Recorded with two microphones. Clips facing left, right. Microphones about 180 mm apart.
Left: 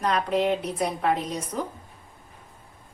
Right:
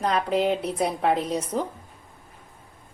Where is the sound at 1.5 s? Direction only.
30° right (ahead or behind).